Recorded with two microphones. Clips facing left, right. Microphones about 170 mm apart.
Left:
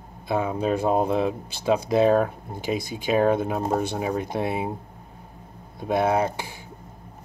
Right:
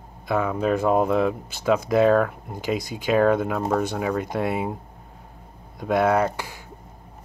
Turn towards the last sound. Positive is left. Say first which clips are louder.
# right 2 dB
turn(degrees=25)  # may be behind; listen again after turning